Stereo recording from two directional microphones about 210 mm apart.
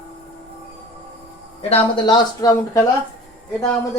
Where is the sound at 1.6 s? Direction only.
25° left (ahead or behind).